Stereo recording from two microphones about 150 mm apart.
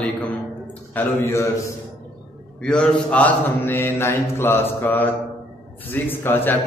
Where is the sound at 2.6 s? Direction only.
5° left (ahead or behind).